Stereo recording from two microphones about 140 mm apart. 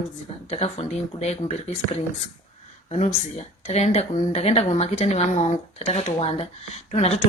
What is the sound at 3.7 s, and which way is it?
Speech, 50° left (ahead or behind).